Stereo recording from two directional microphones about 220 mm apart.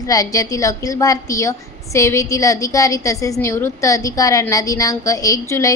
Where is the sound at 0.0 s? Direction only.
15° left (ahead or behind).